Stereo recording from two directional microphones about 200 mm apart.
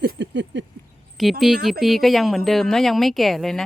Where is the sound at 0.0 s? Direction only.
55° right (ahead or behind).